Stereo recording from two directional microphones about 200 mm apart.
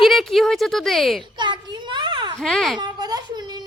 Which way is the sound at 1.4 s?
25° right (ahead or behind).